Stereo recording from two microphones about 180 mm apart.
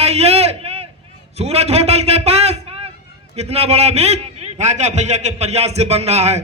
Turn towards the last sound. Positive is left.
turn(degrees=-40)  # may be behind; listen again after turning